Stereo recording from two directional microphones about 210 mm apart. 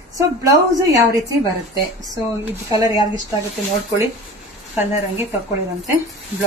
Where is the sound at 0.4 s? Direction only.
15° right (ahead or behind).